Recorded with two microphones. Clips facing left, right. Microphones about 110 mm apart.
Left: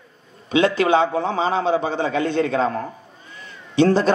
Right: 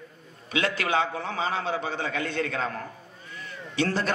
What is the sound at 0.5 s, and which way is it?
A man's voice, 25° left (ahead or behind).